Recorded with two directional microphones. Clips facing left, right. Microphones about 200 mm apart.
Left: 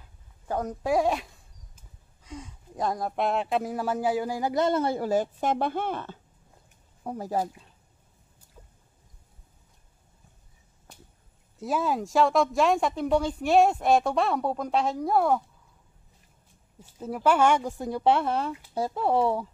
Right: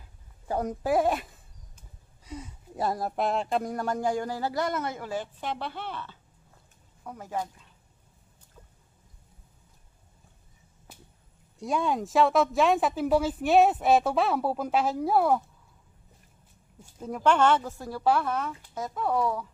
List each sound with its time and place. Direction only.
0.5 s speech: 10° right (ahead or behind); by 6.1 s 50° left (ahead or behind)
7.0 s speech: 35° left (ahead or behind)
11.5 s speech: 5° left (ahead or behind)
17.0 s speech: 5° left (ahead or behind); by 19.4 s 30° left (ahead or behind)